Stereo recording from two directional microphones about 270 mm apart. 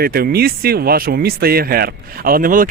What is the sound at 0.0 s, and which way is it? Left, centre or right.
Speech, right.